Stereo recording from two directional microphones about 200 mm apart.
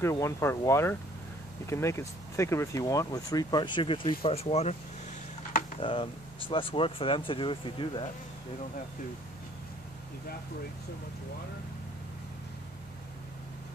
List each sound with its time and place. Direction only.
0.0 s speech: 15° left (ahead or behind); by 4.7 s 30° left (ahead or behind)
5.8 s speech: 25° left (ahead or behind)